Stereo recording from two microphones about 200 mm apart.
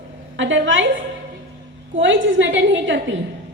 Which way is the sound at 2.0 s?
70° right (ahead or behind).